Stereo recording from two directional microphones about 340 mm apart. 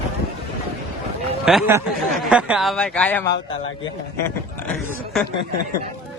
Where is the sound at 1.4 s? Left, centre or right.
Centre.